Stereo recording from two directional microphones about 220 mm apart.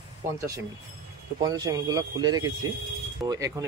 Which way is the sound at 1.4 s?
15° right (ahead or behind).